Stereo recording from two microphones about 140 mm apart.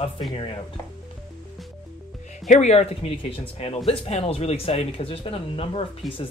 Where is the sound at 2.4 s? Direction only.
55° left (ahead or behind); by 6.2 s 40° left (ahead or behind).